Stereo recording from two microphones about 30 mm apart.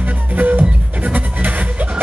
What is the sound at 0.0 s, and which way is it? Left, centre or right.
Music, right.